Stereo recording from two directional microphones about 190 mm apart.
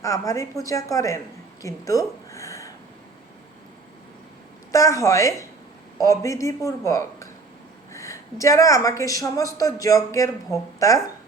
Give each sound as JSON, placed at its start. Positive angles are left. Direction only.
{"t": 0.0, "sound": "a woman's voice", "side_deg": 15}
{"t": 4.7, "sound": "a woman's voice", "side_deg": 15}